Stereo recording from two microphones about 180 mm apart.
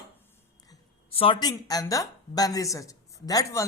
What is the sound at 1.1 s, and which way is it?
A woman's voice, 30° left (ahead or behind).